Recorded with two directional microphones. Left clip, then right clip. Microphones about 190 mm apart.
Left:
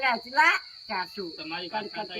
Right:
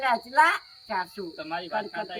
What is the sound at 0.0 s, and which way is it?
A woman's voice, centre (ahead or behind).